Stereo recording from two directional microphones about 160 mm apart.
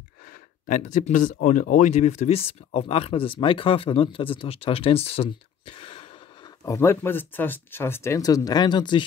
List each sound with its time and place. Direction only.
0.2 s speech: 55° left (ahead or behind); by 6.5 s 35° left (ahead or behind)
6.6 s speech: 15° left (ahead or behind)